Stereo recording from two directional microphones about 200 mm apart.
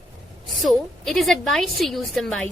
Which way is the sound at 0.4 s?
Centre (ahead or behind).